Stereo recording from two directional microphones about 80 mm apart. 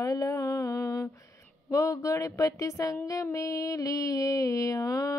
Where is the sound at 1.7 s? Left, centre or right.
Left.